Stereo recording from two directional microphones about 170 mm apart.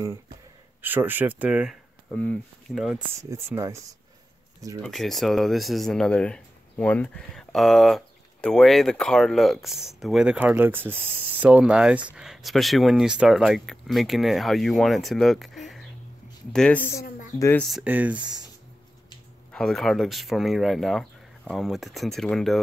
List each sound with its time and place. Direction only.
0.8 s speech: 10° right (ahead or behind)
2.0 s speech: 10° left (ahead or behind)
3.2 s speech: 15° right (ahead or behind)
4.8 s speech: centre (ahead or behind)
17.6 s speech: centre (ahead or behind)
18.1 s speech: 25° right (ahead or behind)
19.5 s speech: centre (ahead or behind)